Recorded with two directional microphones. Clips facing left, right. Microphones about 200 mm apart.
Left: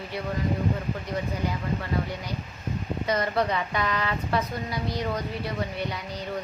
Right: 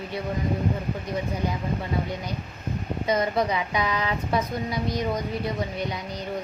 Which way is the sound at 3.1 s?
15° right (ahead or behind).